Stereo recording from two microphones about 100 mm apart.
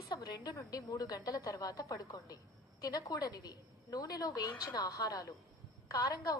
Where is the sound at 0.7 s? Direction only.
40° left (ahead or behind).